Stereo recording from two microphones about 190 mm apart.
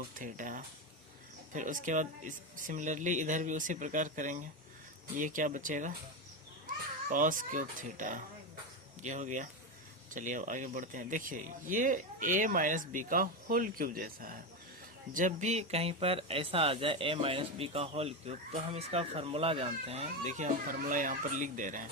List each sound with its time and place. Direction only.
0.1 s speech: 45° right (ahead or behind)
7.1 s speech: 45° right (ahead or behind)